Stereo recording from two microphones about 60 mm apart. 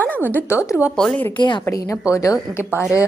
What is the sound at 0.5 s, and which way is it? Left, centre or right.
A woman's voice, left.